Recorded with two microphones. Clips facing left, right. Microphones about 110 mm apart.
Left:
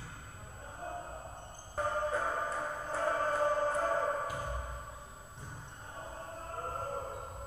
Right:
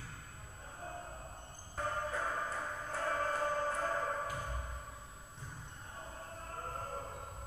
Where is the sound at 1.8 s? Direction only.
25° left (ahead or behind).